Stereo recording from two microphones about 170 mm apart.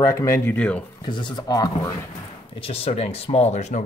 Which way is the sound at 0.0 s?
20° left (ahead or behind).